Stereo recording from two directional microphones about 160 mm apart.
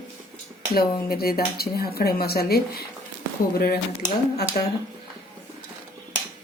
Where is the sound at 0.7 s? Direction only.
70° left (ahead or behind).